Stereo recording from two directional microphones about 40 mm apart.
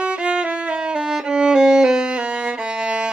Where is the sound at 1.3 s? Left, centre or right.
Right.